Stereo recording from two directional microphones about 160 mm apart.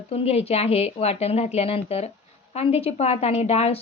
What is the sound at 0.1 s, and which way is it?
A woman's voice, 40° left (ahead or behind).